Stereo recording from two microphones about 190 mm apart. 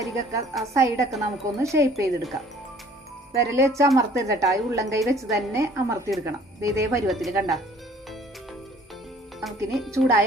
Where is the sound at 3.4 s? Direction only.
15° right (ahead or behind).